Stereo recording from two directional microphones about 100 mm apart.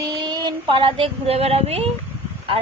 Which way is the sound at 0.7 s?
60° right (ahead or behind).